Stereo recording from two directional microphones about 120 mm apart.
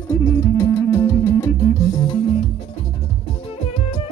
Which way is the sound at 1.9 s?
40° left (ahead or behind).